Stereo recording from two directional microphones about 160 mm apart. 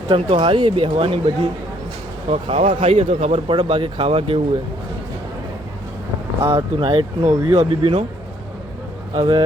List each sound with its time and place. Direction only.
0.1 s speech: 30° right (ahead or behind)
6.4 s speech: 25° right (ahead or behind)
9.1 s speech: 30° right (ahead or behind)